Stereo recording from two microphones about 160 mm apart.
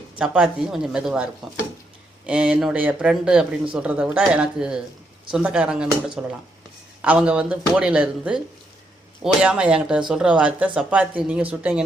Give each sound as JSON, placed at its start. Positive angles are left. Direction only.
{"t": 0.2, "sound": "speech", "side_deg": -5}